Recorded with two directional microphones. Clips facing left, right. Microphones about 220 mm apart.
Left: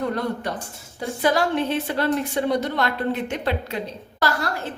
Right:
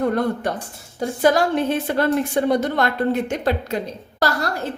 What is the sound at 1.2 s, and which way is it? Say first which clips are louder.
A woman's voice: right 3 dB; 45° right (ahead or behind).